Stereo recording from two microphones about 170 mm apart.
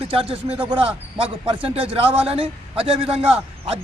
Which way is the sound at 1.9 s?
35° right (ahead or behind).